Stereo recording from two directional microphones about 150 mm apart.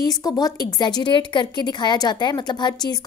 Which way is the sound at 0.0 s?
25° left (ahead or behind).